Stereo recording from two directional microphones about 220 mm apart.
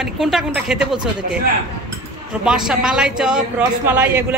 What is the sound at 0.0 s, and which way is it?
Speech, centre (ahead or behind).